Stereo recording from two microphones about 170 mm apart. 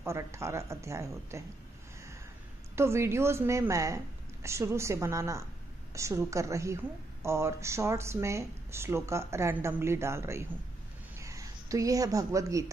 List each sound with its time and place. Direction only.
0.0 s a woman's voice: 15° right (ahead or behind)
2.7 s a woman's voice: 15° right (ahead or behind)